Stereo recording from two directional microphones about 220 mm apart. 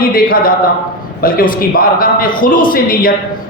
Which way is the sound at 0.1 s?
40° left (ahead or behind).